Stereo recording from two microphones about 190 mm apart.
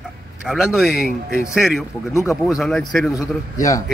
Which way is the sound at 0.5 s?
Centre (ahead or behind).